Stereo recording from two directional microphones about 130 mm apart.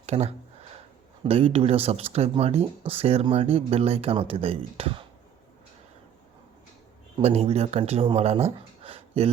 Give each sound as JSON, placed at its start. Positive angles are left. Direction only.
{"t": 0.0, "sound": "a sound", "side_deg": -55}
{"t": 1.2, "sound": "speech", "side_deg": -45}
{"t": 7.2, "sound": "speech", "side_deg": -50}